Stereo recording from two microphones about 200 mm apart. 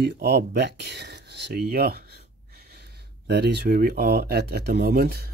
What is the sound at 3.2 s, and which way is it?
Speech, 55° right (ahead or behind).